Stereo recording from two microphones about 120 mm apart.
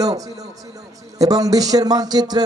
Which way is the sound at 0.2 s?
30° right (ahead or behind).